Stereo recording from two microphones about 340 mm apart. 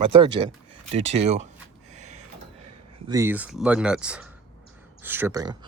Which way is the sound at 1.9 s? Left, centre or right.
Centre.